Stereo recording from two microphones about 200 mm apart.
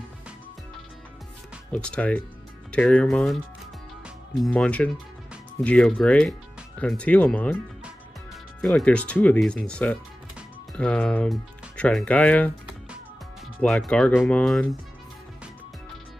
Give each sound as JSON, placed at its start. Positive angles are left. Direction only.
{"t": 1.7, "sound": "speech", "side_deg": 5}
{"t": 8.5, "sound": "speech", "side_deg": 5}
{"t": 13.6, "sound": "speech", "side_deg": 5}